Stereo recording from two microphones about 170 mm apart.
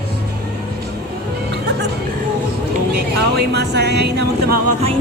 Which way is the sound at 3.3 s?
75° right (ahead or behind).